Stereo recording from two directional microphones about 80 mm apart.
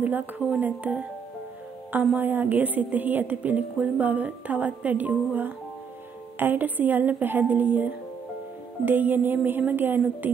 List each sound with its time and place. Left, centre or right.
0.0 s a woman's voice: right